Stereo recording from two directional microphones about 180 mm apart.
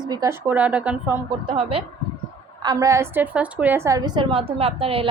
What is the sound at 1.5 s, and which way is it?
A woman's voice, 30° right (ahead or behind).